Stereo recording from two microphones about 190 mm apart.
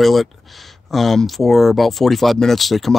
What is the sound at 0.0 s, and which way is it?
Speech, centre (ahead or behind).